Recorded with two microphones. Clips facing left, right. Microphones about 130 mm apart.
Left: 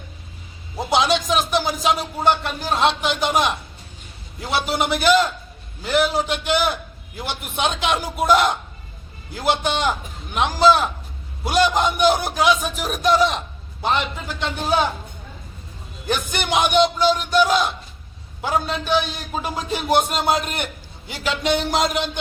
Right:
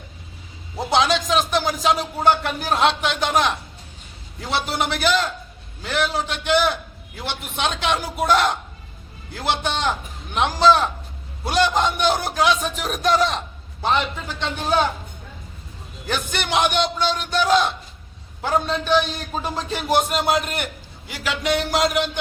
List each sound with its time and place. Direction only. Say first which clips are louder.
0.9 s a man's voice: even; 10° left (ahead or behind)
16.0 s a man's voice: left 2 dB; 15° left (ahead or behind)